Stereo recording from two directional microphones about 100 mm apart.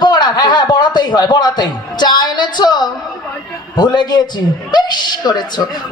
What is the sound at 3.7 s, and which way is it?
A woman's voice, 45° left (ahead or behind).